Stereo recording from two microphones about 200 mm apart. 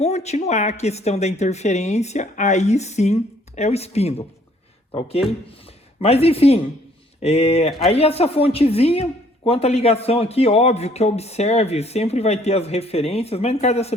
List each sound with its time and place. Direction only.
0.0 s speech: 35° left (ahead or behind)